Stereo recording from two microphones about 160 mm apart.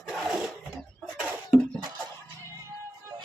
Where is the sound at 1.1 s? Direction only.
5° right (ahead or behind).